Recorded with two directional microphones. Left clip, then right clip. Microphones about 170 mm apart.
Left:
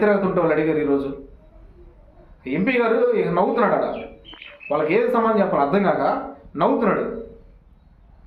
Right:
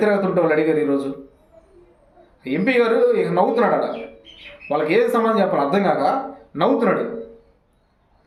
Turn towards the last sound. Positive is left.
turn(degrees=-20)  # may be behind; listen again after turning